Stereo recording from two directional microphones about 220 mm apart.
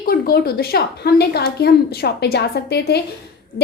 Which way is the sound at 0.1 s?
45° left (ahead or behind).